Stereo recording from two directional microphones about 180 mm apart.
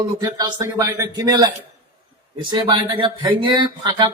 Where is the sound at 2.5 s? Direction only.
25° right (ahead or behind).